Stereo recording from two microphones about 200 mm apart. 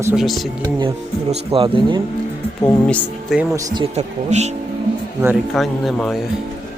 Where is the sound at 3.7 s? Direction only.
30° right (ahead or behind).